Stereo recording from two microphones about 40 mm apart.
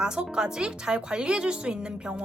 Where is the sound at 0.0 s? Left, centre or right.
Centre.